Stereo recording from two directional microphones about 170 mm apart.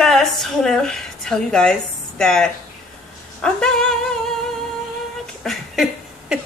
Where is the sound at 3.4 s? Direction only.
5° left (ahead or behind).